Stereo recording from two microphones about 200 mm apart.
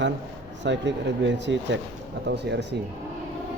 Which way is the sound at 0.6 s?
60° right (ahead or behind).